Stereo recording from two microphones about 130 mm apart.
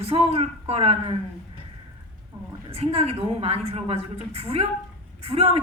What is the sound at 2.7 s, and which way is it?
A woman's voice, 50° right (ahead or behind).